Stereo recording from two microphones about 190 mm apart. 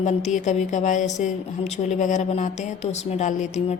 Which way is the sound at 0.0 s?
40° left (ahead or behind).